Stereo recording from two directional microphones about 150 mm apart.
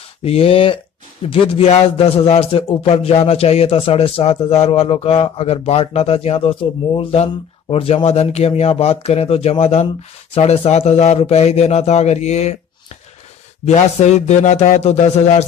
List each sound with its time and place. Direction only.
0.2 s a man's voice: 40° left (ahead or behind)
13.7 s a man's voice: 50° left (ahead or behind)